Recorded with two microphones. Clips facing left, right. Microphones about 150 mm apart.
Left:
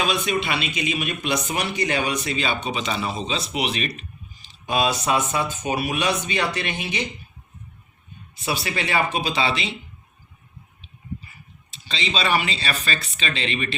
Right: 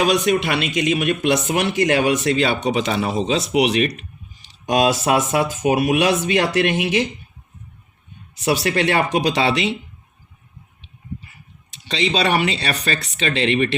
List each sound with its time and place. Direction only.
0.3 s speech: 70° right (ahead or behind)
4.4 s a sound: 75° right (ahead or behind)
5.0 s speech: 75° right (ahead or behind)
8.4 s speech: 80° right
11.9 s speech: 70° right (ahead or behind)